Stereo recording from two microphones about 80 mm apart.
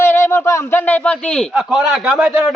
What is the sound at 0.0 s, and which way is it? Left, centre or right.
Speech, left.